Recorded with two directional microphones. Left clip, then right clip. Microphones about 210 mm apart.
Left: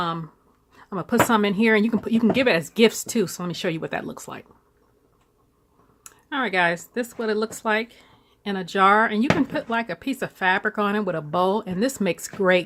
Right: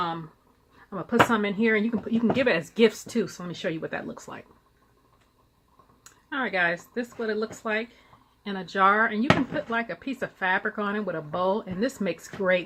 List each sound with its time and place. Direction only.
0.9 s speech: 40° left (ahead or behind)
6.0 s speech: 30° left (ahead or behind)